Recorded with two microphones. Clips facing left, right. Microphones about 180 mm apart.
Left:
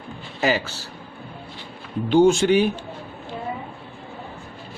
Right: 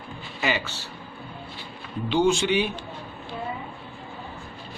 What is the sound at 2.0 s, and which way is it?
Speech, 45° left (ahead or behind).